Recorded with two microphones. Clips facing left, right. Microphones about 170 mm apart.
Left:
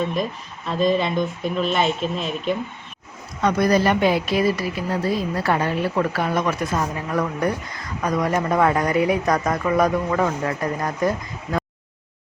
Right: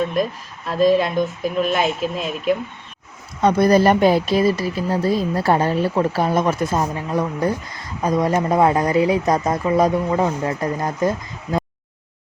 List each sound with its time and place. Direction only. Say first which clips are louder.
0.7 s speech: right 4 dB; 5° right (ahead or behind)
3.4 s speech: right 4 dB; 30° right (ahead or behind)
11.5 s a sound: right 2 dB; 20° right (ahead or behind)